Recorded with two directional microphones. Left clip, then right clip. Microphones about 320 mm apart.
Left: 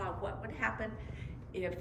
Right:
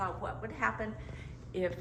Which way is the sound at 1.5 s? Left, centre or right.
Centre.